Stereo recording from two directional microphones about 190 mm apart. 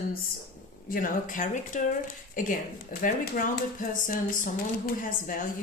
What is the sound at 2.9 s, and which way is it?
Speech, 45° left (ahead or behind).